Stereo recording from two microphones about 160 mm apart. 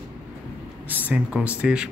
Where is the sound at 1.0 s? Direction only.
10° right (ahead or behind).